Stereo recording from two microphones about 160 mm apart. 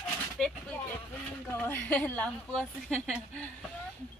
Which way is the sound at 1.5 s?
15° left (ahead or behind).